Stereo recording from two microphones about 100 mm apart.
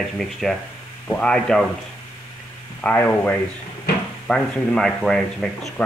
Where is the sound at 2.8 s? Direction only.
15° left (ahead or behind).